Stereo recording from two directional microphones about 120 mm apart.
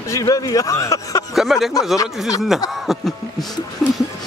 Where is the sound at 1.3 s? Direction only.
Centre (ahead or behind).